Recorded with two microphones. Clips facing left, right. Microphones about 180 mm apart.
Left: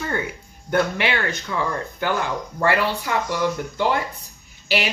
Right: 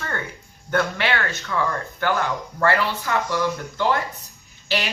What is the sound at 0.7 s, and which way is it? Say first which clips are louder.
A woman's voice: left 2 dB; 15° left (ahead or behind).